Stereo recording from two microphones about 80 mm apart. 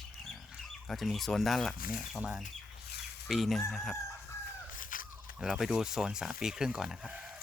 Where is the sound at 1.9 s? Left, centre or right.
Centre.